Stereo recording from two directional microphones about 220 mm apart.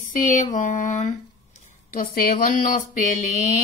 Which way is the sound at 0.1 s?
35° left (ahead or behind).